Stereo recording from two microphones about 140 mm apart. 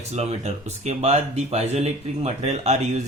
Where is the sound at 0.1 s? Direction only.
50° right (ahead or behind).